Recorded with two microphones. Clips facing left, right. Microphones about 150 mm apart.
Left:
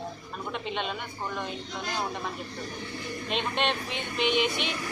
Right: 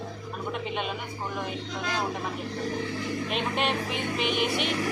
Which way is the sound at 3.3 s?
5° right (ahead or behind).